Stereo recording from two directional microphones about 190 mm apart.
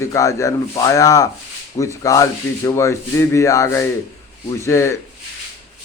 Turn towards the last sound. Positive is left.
turn(degrees=15)  # may be behind; listen again after turning